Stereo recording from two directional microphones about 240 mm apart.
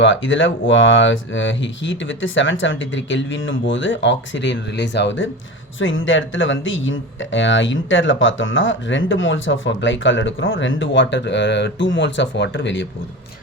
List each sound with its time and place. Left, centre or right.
0.0 s speech: left